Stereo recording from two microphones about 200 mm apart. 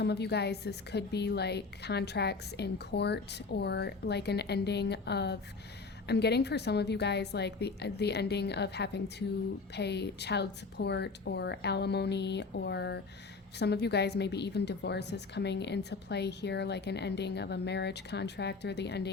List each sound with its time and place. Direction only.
0.0 s a woman's voice: 55° left (ahead or behind)